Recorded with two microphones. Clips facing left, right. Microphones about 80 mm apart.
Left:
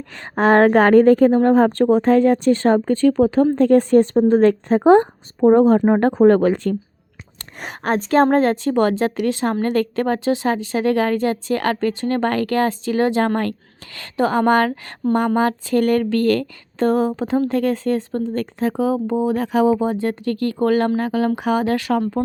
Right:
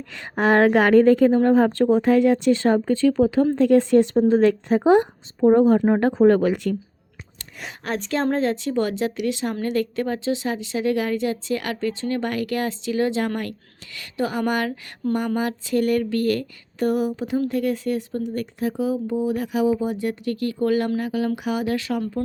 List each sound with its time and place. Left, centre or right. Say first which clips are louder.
0.5 s a woman's voice: left 4 dB; left
1.0 s speech: left 3 dB; left
1.5 s speech: left 3 dB; left
4.4 s a woman's voice: left 4 dB; left
5.4 s speech: left 3 dB; left
5.8 s speech: left 3 dB; left
14.3 s speech: left 9 dB; left
17.4 s speech: left 4 dB; left
18.3 s speech: left 4 dB; left
19.5 s speech: left 5 dB; left
19.8 s speech: left 5 dB; left
20.4 s speech: left 4 dB; left
21.8 s speech: left 6 dB; left